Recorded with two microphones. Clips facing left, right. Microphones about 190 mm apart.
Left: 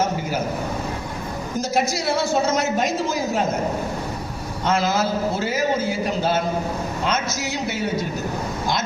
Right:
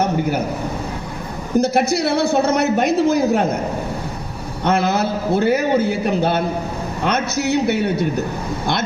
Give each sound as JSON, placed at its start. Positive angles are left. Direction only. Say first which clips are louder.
{"t": 0.0, "sound": "a man's voice", "louder": "right 4 dB", "side_deg": -60}
{"t": 1.5, "sound": "a woman's voice", "louder": "right 7 dB", "side_deg": -60}
{"t": 4.6, "sound": "a woman's voice", "louder": "right 3 dB", "side_deg": -60}